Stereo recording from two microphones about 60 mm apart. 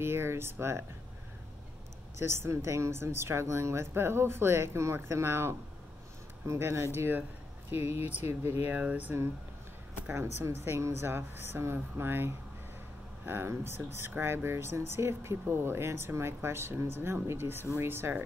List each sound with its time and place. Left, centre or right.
0.0 s speech: right
2.1 s speech: right
8.6 s speech: right
10.1 s speech: right